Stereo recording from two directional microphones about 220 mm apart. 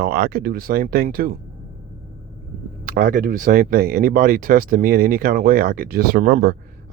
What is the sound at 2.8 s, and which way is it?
Speech, 40° right (ahead or behind).